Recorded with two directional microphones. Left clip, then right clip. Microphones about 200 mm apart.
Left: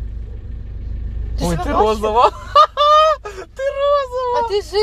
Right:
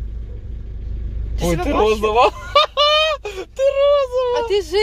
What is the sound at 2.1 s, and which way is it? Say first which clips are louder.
Speech: left 4 dB; 35° right (ahead or behind).